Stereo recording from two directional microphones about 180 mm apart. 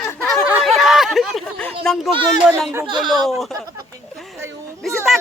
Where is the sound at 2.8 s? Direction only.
25° right (ahead or behind).